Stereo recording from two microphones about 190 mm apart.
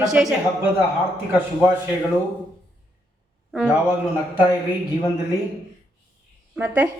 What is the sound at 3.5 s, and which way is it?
Speech, 5° right (ahead or behind).